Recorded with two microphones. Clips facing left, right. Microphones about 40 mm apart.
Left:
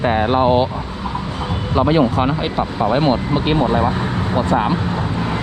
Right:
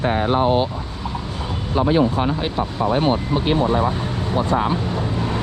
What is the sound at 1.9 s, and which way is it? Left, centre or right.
Speech, left.